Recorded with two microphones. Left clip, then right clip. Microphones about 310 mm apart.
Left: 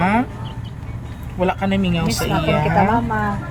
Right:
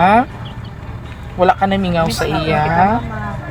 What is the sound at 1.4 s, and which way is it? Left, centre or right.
Speech, centre.